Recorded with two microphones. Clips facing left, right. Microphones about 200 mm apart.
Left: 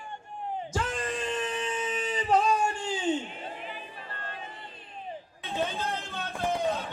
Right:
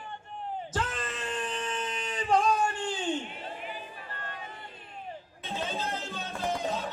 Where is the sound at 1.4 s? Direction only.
10° left (ahead or behind).